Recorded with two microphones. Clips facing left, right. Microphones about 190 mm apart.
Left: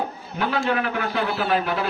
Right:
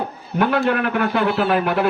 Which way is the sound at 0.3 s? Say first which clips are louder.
Right 5 dB; 55° right (ahead or behind).